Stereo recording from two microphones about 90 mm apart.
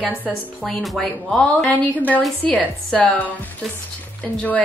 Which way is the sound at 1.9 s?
20° left (ahead or behind).